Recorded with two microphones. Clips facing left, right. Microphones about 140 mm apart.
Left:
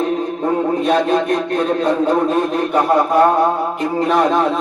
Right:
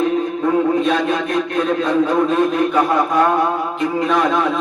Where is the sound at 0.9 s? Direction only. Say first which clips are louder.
Left 3 dB; 35° left (ahead or behind).